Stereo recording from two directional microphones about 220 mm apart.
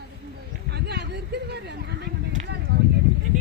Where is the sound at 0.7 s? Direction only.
50° right (ahead or behind).